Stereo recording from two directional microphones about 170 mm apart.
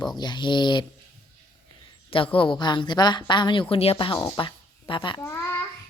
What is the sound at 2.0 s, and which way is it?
A woman's voice, 30° left (ahead or behind).